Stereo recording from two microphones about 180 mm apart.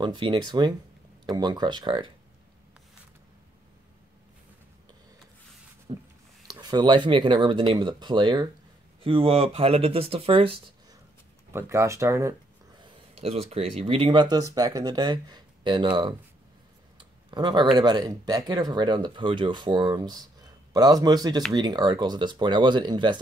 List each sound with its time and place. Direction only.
0.0 s speech: 25° right (ahead or behind)
5.9 s speech: 30° right (ahead or behind)
11.5 s speech: 15° right (ahead or behind)
12.8 s speech: 30° right (ahead or behind)
17.3 s speech: 25° right (ahead or behind)